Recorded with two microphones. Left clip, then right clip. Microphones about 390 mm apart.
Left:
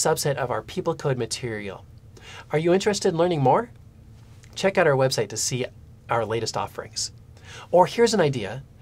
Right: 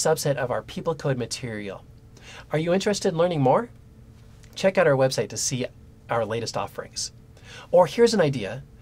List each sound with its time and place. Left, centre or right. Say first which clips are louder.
0.0 s speech: even; centre